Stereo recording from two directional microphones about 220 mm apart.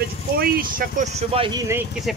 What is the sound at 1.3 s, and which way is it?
Speech, 20° right (ahead or behind).